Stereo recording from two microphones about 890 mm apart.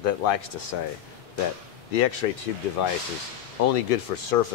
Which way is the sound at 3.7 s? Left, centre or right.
Left.